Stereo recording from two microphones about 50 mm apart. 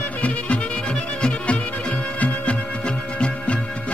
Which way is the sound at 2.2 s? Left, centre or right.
Left.